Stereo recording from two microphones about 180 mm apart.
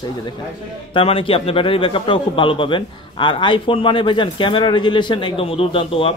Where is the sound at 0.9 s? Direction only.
30° left (ahead or behind).